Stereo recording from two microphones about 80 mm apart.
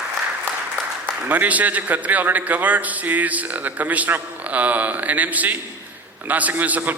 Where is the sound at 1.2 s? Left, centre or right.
Right.